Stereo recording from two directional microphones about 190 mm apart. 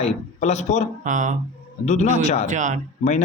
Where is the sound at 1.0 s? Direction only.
40° right (ahead or behind).